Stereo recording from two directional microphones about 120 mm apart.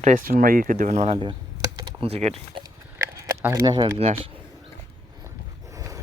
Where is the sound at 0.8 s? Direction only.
80° right.